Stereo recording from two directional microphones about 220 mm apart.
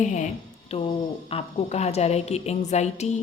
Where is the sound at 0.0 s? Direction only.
35° left (ahead or behind).